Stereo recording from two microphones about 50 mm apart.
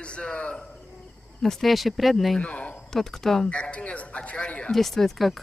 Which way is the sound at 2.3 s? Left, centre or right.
Left.